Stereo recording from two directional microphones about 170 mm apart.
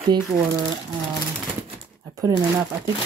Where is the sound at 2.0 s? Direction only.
20° right (ahead or behind).